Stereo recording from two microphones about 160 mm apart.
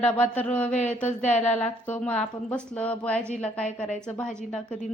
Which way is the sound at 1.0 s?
50° left (ahead or behind).